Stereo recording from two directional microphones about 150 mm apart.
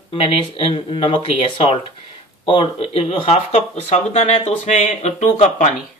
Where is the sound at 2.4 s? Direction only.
35° left (ahead or behind).